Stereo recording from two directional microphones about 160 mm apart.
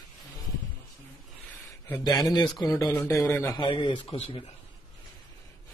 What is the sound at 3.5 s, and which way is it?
Speech, 30° left (ahead or behind).